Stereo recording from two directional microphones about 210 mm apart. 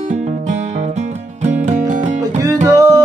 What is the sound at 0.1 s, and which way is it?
Music, 35° right (ahead or behind).